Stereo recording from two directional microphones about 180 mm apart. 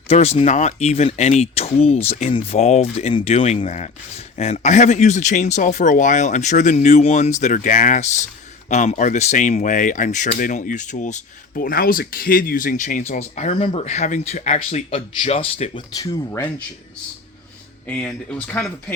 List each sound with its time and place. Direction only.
0.1 s speech: 35° left (ahead or behind)
16.0 s speech: 15° left (ahead or behind)
17.8 s speech: 5° left (ahead or behind)